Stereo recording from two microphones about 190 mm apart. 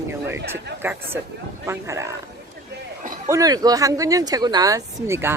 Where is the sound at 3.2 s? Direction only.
15° right (ahead or behind).